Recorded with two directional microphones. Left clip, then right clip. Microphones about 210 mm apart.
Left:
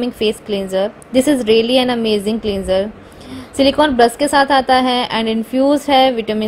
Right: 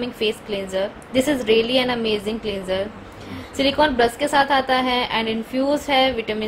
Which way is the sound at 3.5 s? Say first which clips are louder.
Left 6 dB; 30° left (ahead or behind).